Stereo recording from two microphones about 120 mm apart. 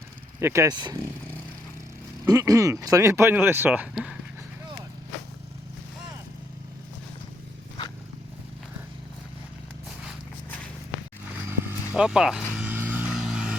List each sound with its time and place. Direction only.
0.3 s speech: 25° right (ahead or behind)
2.2 s speech: 30° right (ahead or behind); by 4.1 s 10° right (ahead or behind)
11.6 s vehicle: 15° right (ahead or behind)
12.0 s speech: 5° right (ahead or behind)
12.7 s vehicle: 15° right (ahead or behind)